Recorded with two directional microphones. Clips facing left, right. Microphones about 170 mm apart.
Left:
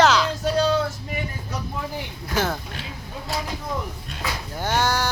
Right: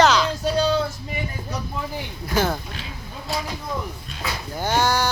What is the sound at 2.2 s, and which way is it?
Speech, centre (ahead or behind).